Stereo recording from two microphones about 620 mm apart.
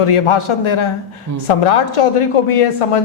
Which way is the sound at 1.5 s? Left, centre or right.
Left.